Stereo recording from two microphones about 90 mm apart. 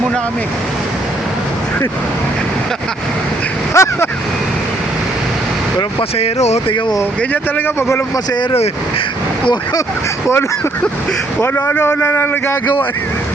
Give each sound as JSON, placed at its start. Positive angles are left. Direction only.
{"t": 3.8, "sound": "speech", "side_deg": 35}
{"t": 6.0, "sound": "speech", "side_deg": 90}
{"t": 7.8, "sound": "a man's voice", "side_deg": 30}
{"t": 8.1, "sound": "speech", "side_deg": 50}
{"t": 11.3, "sound": "a man's voice", "side_deg": 30}